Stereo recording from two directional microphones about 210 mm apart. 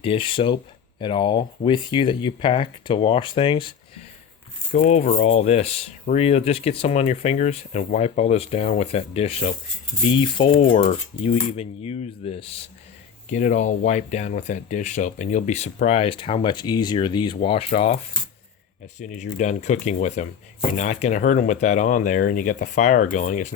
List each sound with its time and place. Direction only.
0.0 s speech: 25° left (ahead or behind)